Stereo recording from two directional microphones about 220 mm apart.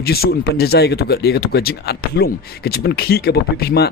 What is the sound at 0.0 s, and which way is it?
Speech, 45° left (ahead or behind).